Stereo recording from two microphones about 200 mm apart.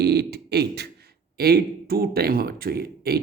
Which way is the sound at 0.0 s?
55° right (ahead or behind).